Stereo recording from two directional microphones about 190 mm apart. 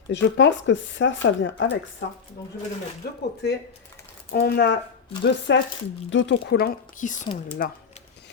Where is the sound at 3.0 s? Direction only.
55° left (ahead or behind); by 6.3 s 75° left (ahead or behind).